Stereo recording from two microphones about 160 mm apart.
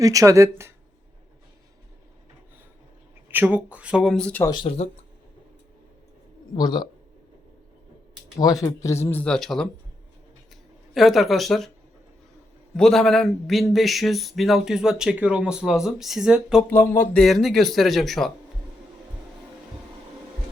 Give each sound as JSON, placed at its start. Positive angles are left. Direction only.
{"t": 0.0, "sound": "speech", "side_deg": -20}
{"t": 3.2, "sound": "speech", "side_deg": -10}
{"t": 4.1, "sound": "speech", "side_deg": 5}
{"t": 4.4, "sound": "speech", "side_deg": 30}
{"t": 6.6, "sound": "speech", "side_deg": 25}
{"t": 8.4, "sound": "speech", "side_deg": 25}
{"t": 10.9, "sound": "a man's voice", "side_deg": 0}
{"t": 12.7, "sound": "a man's voice", "side_deg": 5}
{"t": 16.6, "sound": "speech", "side_deg": 15}
{"t": 17.2, "sound": "a man's voice", "side_deg": 0}